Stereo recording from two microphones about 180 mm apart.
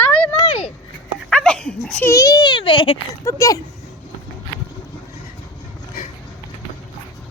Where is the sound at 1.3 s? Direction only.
5° left (ahead or behind); by 2.9 s 30° left (ahead or behind).